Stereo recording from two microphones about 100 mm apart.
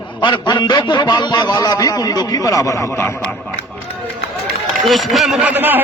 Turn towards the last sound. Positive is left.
turn(degrees=-20)  # may be behind; listen again after turning